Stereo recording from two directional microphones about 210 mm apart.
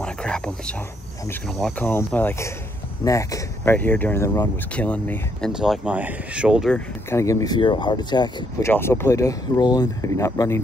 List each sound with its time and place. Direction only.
0.0 s a sound: 5° left (ahead or behind)
1.5 s speech: 5° left (ahead or behind)
5.5 s speech: 5° right (ahead or behind)
7.1 s speech: 15° left (ahead or behind)